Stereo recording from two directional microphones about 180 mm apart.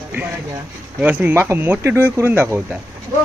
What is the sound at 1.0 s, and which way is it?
Speech, 10° right (ahead or behind).